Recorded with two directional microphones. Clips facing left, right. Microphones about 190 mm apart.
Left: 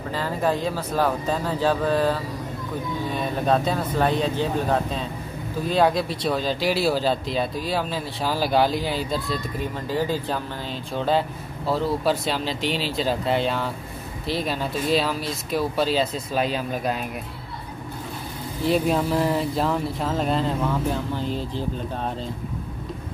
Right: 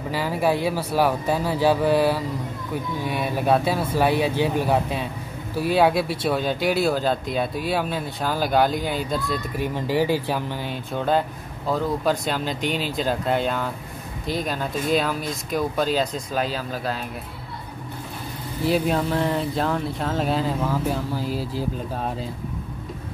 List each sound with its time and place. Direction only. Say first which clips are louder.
0.1 s speech: right 2 dB; 10° right (ahead or behind)
8.7 s speech: even; 50° right (ahead or behind)
9.8 s speech: right 4 dB; 10° right (ahead or behind); by 12.4 s 5° left (ahead or behind)
12.4 s speech: even; 50° right (ahead or behind)
12.9 s speech: even; centre (ahead or behind)
14.2 s speech: even; 45° right (ahead or behind)
15.5 s speech: even; 5° left (ahead or behind)
16.5 s speech: left 2 dB; 15° left (ahead or behind)
18.6 s speech: even; centre (ahead or behind)